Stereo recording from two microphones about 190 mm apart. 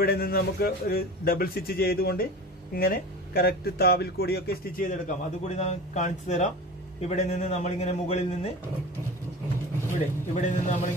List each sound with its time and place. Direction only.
0.0 s a man's voice: 50° left (ahead or behind); by 8.5 s 35° left (ahead or behind)
9.9 s a man's voice: 40° left (ahead or behind)